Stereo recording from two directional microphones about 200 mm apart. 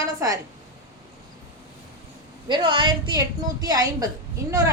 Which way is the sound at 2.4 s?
25° right (ahead or behind).